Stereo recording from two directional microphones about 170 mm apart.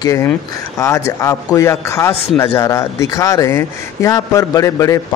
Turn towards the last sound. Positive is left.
turn(degrees=20)  # may be behind; listen again after turning